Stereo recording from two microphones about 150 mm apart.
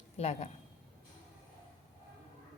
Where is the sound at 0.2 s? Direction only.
45° left (ahead or behind).